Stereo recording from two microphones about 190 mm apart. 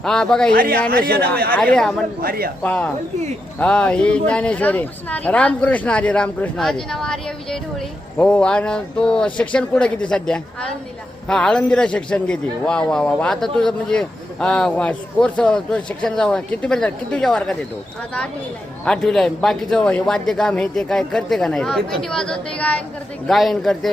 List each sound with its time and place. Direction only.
0.0 s a man's voice: 5° left (ahead or behind)
0.5 s a man's voice: 50° right (ahead or behind)
0.8 s a man's voice: 5° left (ahead or behind)
2.2 s a man's voice: 50° right (ahead or behind)
2.6 s a man's voice: 10° left (ahead or behind)
18.9 s a man's voice: 5° left (ahead or behind)